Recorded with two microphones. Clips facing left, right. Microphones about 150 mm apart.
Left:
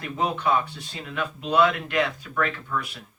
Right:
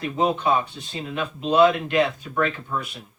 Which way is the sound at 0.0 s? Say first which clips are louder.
Right 4 dB; 20° right (ahead or behind).